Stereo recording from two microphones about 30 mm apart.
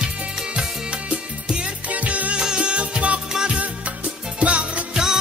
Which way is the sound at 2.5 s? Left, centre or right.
Right.